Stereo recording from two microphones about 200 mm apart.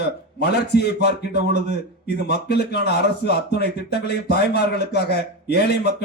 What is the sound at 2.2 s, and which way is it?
A man's voice, 55° left (ahead or behind).